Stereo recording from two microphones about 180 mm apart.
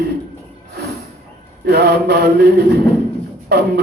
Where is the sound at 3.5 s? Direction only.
65° right (ahead or behind).